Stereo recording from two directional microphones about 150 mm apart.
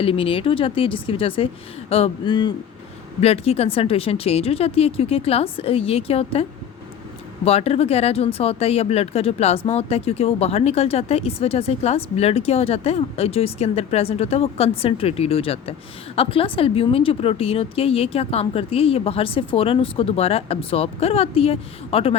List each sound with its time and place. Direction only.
0.0 s speech: 40° left (ahead or behind)
3.2 s speech: 45° left (ahead or behind)
7.4 s speech: 45° left (ahead or behind)